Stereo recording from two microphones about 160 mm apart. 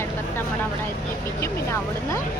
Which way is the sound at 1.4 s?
15° left (ahead or behind).